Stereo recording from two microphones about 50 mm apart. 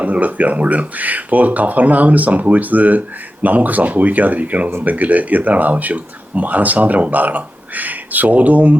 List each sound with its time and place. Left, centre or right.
0.0 s speech: right